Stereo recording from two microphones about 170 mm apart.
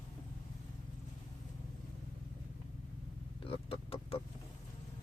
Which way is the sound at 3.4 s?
35° left (ahead or behind).